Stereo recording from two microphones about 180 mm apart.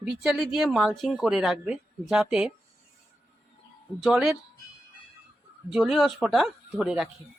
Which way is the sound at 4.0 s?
Centre (ahead or behind).